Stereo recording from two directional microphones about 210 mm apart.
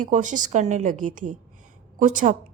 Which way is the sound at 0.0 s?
35° right (ahead or behind).